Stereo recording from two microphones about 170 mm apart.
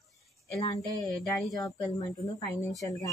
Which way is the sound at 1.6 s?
20° left (ahead or behind).